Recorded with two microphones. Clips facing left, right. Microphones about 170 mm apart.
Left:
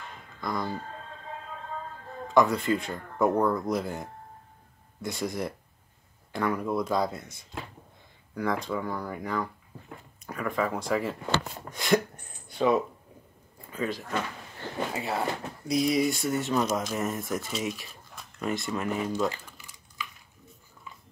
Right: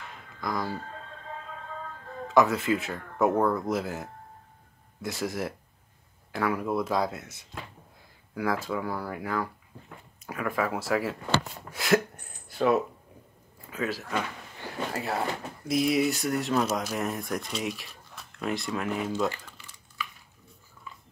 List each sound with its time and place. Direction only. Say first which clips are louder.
0.4 s speech: even; centre (ahead or behind)
2.2 s speech: even; 5° right (ahead or behind)
19.3 s typing: even; 15° left (ahead or behind)